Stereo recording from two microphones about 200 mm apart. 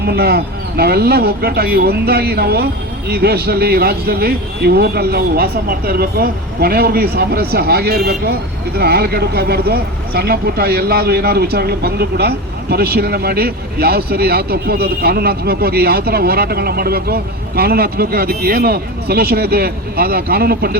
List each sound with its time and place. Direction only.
0.0 s speech: 50° right (ahead or behind)